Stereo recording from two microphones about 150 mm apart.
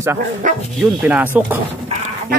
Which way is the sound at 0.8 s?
10° right (ahead or behind).